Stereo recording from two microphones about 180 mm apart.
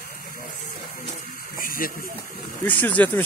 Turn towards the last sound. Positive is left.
turn(degrees=10)  # may be behind; listen again after turning